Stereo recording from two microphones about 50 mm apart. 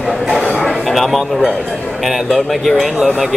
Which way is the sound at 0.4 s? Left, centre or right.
Centre.